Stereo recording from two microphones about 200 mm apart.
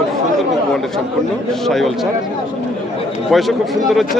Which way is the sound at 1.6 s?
Centre (ahead or behind).